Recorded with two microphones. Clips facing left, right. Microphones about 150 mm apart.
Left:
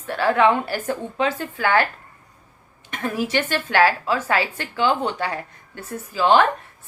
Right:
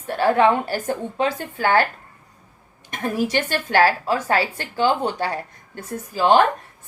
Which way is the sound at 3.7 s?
40° right (ahead or behind).